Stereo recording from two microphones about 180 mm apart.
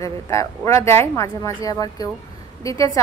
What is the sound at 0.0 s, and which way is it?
A woman's voice, 15° left (ahead or behind).